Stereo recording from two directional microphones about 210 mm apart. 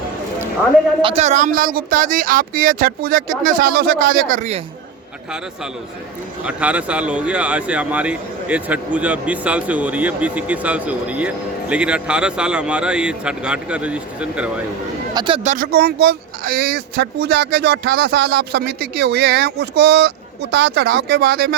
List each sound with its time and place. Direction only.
1.0 s speech: 30° right (ahead or behind)
6.4 s speech: 5° right (ahead or behind)
15.1 s speech: 20° right (ahead or behind)
15.4 s speech: 40° right (ahead or behind)